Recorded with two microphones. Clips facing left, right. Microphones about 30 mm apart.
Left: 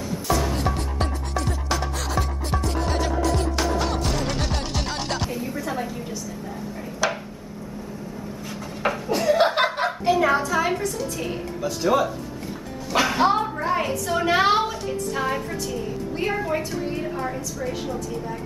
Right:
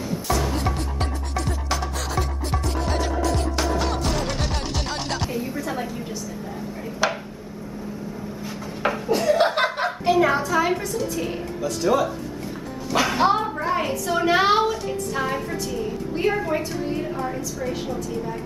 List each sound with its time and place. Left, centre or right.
0.3 s music: centre
7.0 s a sound: right
8.8 s chuckle: centre
11.6 s speech: centre
12.9 s a sound: centre
17.6 s a woman's voice: centre